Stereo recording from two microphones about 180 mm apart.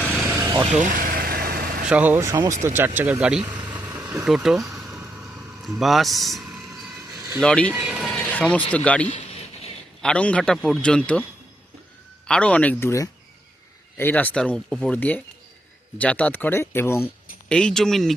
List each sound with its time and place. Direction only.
0.1 s vehicle: 15° right (ahead or behind)
0.8 s vehicle: 50° right (ahead or behind)
1.9 s speech: 10° right (ahead or behind)
3.8 s a sound: 20° right (ahead or behind)
5.6 s a man's voice: centre (ahead or behind)
7.7 s vehicle: 5° right (ahead or behind)
8.7 s speech: 5° left (ahead or behind)
9.0 s a sound: 35° left (ahead or behind)
10.0 s a man's voice: 5° left (ahead or behind)